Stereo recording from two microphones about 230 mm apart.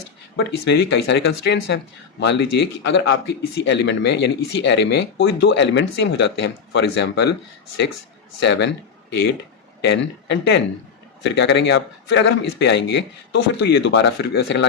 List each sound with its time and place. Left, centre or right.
0.3 s speech: left
8.4 s speech: left